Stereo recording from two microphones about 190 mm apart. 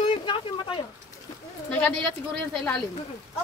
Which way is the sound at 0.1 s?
25° left (ahead or behind).